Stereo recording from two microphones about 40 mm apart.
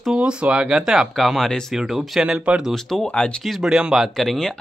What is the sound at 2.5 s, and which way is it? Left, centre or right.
Speech, right.